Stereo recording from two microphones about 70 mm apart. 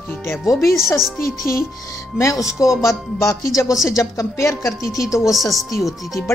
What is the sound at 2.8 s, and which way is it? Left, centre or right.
Speech, left.